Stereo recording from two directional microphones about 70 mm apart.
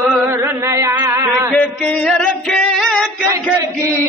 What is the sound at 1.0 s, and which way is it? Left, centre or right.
Music, right.